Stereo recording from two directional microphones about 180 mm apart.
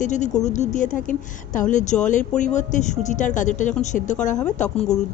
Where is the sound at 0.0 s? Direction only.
40° left (ahead or behind).